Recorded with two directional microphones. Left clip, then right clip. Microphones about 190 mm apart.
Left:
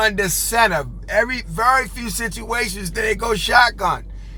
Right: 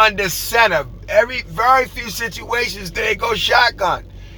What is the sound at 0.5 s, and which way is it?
Speech, 25° left (ahead or behind).